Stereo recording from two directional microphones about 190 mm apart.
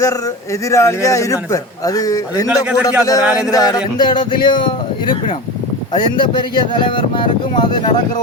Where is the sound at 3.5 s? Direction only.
20° left (ahead or behind).